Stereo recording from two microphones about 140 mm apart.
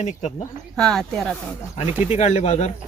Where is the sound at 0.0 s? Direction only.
55° left (ahead or behind).